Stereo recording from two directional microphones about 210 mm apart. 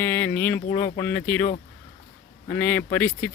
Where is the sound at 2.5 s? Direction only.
10° left (ahead or behind).